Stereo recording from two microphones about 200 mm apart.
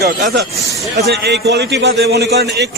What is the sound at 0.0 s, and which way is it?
A man's voice, 50° right (ahead or behind).